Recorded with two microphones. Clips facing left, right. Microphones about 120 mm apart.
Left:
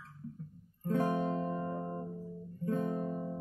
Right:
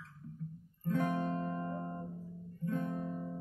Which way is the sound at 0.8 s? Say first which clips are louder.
Left 2 dB; 30° left (ahead or behind).